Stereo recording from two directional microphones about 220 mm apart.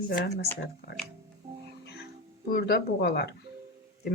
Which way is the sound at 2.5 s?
45° left (ahead or behind).